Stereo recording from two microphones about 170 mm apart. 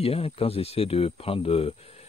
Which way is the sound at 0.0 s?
35° left (ahead or behind).